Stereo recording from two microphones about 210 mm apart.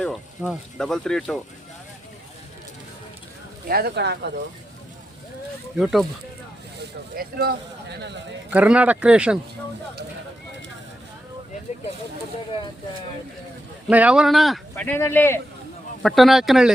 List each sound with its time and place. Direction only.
0.0 s speech: centre (ahead or behind)
3.7 s speech: 50° right (ahead or behind)
5.7 s speech: centre (ahead or behind)
7.2 s speech: 50° right (ahead or behind)
8.4 s speech: 5° right (ahead or behind)
13.8 s speech: 5° right (ahead or behind); by 15.4 s 10° left (ahead or behind)
16.0 s speech: centre (ahead or behind)